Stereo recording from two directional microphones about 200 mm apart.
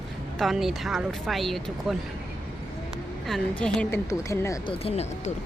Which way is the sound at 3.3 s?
5° left (ahead or behind).